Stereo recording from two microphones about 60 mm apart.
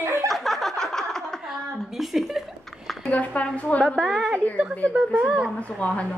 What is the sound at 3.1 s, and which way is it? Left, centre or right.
Speech, left.